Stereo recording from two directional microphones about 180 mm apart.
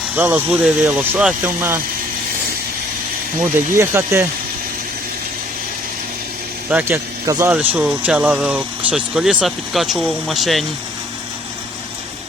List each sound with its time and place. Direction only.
0.2 s speech: 10° right (ahead or behind)
3.8 s speech: 15° right (ahead or behind)
6.7 s speech: 10° right (ahead or behind)